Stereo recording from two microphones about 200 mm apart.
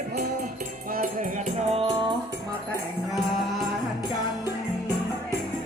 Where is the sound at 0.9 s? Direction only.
40° right (ahead or behind); by 2.2 s 25° right (ahead or behind).